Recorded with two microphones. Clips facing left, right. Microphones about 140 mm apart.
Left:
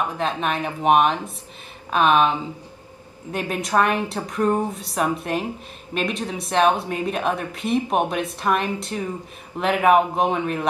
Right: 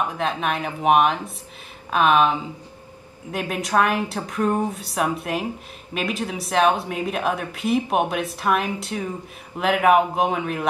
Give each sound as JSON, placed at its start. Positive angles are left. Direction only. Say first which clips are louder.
{"t": 0.2, "sound": "speech", "louder": "even", "side_deg": 0}